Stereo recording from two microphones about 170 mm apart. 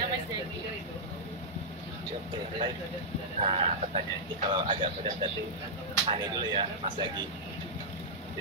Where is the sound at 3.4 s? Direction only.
30° right (ahead or behind).